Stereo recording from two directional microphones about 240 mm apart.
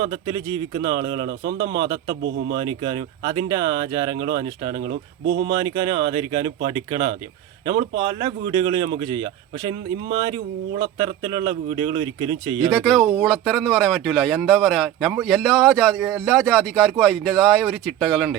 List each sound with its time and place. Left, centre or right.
0.0 s speech: centre
4.8 s speech: right
5.5 s speech: centre
12.7 s speech: centre